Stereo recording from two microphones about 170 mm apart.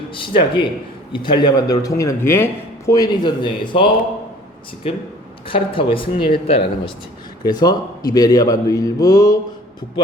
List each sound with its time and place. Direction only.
0.1 s a man's voice: 30° left (ahead or behind)
5.5 s a man's voice: 30° left (ahead or behind)